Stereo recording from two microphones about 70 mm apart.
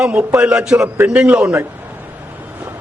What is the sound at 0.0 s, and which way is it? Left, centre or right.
A man's voice, centre.